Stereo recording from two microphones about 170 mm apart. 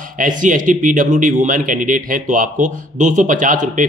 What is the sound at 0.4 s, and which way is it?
A man's voice, 50° right (ahead or behind).